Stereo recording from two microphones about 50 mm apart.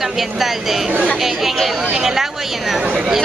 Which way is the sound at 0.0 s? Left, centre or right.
Centre.